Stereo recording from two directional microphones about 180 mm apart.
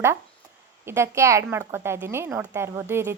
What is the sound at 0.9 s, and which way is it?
A woman's voice, 15° right (ahead or behind).